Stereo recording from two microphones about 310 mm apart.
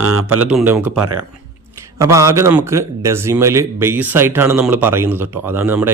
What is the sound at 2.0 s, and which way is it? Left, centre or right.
Speech, centre.